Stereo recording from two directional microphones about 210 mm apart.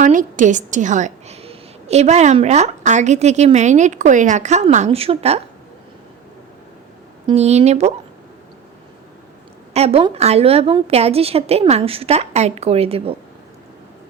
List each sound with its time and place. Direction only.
0.0 s a woman's voice: 40° right (ahead or behind)
7.3 s a woman's voice: 30° right (ahead or behind)
9.7 s a woman's voice: 30° right (ahead or behind)